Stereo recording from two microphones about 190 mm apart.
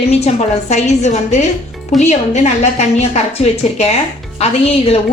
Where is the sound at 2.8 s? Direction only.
35° left (ahead or behind).